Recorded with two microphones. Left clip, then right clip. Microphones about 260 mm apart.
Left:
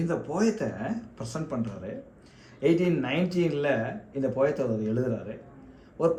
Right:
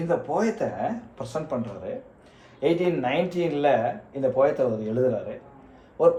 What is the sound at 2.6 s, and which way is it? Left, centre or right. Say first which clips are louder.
Speech: right 2 dB; left.